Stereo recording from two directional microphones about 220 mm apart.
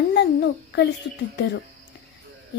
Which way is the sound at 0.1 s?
50° left (ahead or behind).